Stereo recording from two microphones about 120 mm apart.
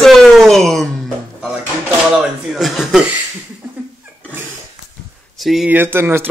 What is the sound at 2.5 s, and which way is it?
Speech, 5° right (ahead or behind).